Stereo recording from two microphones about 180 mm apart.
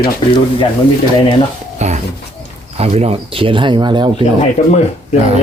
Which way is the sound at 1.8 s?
40° right (ahead or behind).